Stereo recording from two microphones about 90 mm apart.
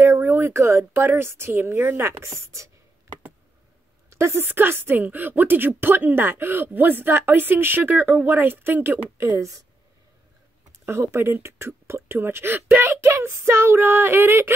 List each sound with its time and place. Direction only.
0.0 s a woman's voice: 25° right (ahead or behind)
4.1 s a woman's voice: 30° right (ahead or behind)
9.3 s speech: 40° right (ahead or behind)
10.9 s a woman's voice: 30° right (ahead or behind)